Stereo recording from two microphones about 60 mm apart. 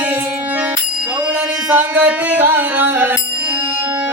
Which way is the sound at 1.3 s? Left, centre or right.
Right.